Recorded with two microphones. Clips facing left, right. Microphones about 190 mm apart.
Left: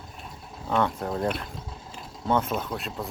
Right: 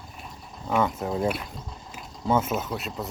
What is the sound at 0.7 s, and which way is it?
Speech, 5° right (ahead or behind).